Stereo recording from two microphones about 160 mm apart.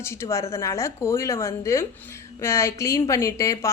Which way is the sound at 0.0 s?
15° left (ahead or behind).